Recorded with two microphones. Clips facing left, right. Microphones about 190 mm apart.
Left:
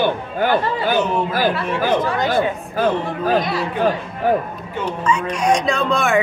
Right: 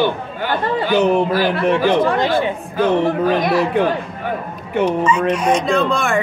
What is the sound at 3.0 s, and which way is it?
Speech, 70° right (ahead or behind).